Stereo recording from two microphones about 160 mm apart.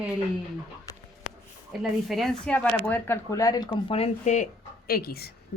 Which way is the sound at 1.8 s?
Centre (ahead or behind).